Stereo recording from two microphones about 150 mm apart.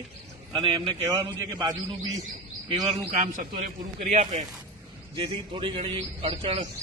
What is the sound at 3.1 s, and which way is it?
A man's voice, 60° right (ahead or behind).